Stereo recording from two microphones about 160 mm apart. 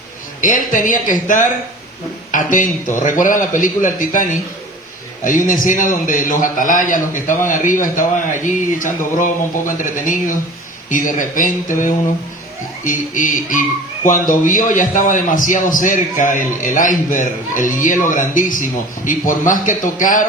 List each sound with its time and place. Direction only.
0.4 s a man's voice: 55° left (ahead or behind)